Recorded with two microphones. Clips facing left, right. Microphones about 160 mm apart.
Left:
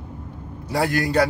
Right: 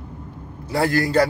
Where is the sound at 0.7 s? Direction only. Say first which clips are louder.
Right 2 dB; 15° left (ahead or behind).